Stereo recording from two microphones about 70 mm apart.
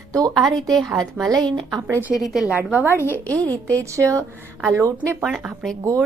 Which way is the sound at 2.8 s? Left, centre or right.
Right.